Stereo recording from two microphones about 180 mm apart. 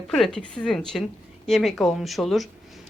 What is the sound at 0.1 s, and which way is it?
A woman's voice, 5° left (ahead or behind).